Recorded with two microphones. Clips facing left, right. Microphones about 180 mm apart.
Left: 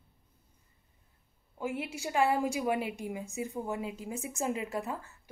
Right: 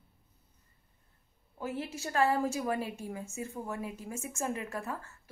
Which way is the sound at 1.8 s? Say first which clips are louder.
Even; 10° left (ahead or behind).